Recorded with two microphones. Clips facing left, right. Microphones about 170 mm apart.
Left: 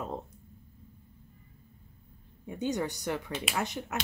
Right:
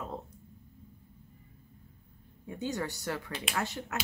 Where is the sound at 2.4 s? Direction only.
20° left (ahead or behind).